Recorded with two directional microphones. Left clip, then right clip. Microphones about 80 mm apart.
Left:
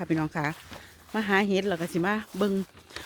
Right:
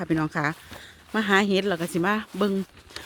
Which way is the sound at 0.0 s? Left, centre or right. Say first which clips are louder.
Right 3 dB; right.